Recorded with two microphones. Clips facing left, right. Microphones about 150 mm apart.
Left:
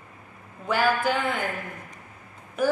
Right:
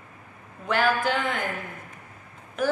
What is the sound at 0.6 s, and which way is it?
Speech, 10° left (ahead or behind).